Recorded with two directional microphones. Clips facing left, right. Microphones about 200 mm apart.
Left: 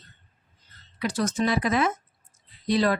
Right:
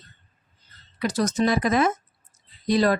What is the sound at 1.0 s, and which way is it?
Speech, 40° right (ahead or behind).